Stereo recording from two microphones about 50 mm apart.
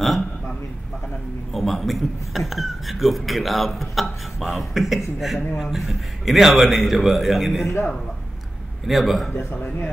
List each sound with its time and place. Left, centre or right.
1.5 s a man's voice: centre
7.6 s speech: left
8.8 s a man's voice: centre
9.5 s speech: left